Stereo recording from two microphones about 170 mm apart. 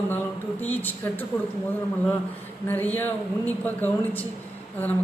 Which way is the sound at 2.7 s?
10° left (ahead or behind).